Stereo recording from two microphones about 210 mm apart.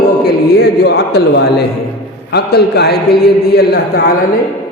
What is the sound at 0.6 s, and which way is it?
A man's voice, 50° left (ahead or behind).